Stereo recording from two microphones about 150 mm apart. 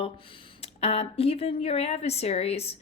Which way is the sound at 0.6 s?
40° left (ahead or behind).